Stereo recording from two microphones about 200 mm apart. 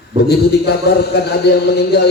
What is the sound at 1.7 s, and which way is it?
Speech, 55° left (ahead or behind).